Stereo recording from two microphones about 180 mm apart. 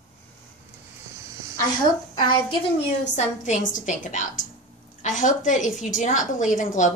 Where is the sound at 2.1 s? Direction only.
30° left (ahead or behind).